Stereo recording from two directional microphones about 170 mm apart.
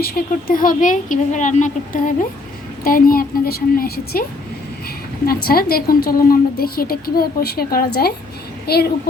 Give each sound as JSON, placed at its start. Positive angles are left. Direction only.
{"t": 0.0, "sound": "a woman's voice", "side_deg": 60}
{"t": 5.2, "sound": "a woman's voice", "side_deg": 60}